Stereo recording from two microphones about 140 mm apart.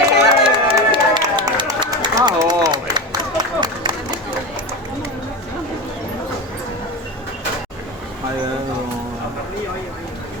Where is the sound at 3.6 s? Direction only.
35° right (ahead or behind).